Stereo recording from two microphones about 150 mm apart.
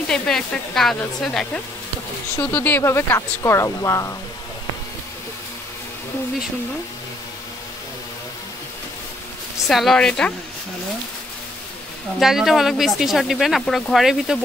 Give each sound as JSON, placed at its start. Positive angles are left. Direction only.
{"t": 0.1, "sound": "speech", "side_deg": 5}
{"t": 9.7, "sound": "speech", "side_deg": 0}
{"t": 12.2, "sound": "speech", "side_deg": 0}